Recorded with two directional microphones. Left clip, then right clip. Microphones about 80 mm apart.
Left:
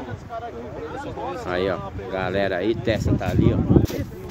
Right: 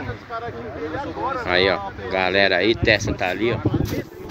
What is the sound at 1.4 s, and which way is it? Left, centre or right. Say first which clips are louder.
Speech: right 6 dB; centre.